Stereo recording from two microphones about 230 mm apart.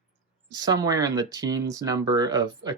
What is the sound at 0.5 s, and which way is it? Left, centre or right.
Speech, centre.